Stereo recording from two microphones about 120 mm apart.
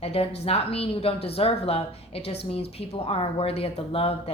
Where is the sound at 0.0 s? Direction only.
55° left (ahead or behind).